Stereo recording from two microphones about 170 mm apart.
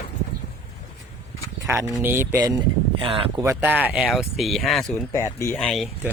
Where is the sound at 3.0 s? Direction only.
35° right (ahead or behind).